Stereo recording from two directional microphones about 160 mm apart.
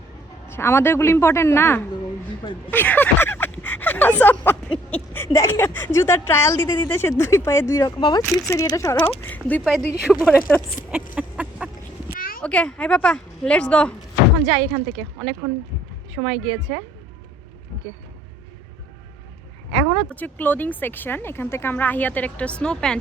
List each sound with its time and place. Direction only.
0.4 s speech: 15° left (ahead or behind)
8.2 s speech: 10° left (ahead or behind)
9.6 s speech: centre (ahead or behind)
10.9 s a sound: 5° right (ahead or behind)
12.1 s a sound: 65° left (ahead or behind)
12.4 s speech: 5° left (ahead or behind)
16.2 s a woman's voice: 15° right (ahead or behind)
20.1 s speech: 10° left (ahead or behind)